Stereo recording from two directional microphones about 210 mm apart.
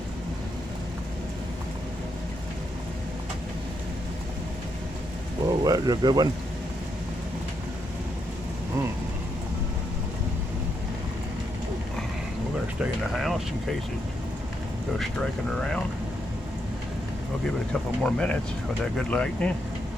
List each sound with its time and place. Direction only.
5.5 s speech: 15° right (ahead or behind)
12.8 s a sound: centre (ahead or behind)
14.9 s speech: centre (ahead or behind)
18.0 s speech: 5° left (ahead or behind)